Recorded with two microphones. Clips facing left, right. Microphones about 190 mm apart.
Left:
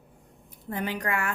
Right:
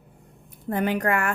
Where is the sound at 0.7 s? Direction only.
55° right (ahead or behind).